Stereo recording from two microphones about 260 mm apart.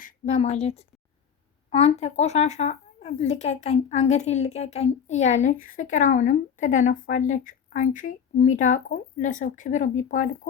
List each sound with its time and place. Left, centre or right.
0.0 s a woman's voice: left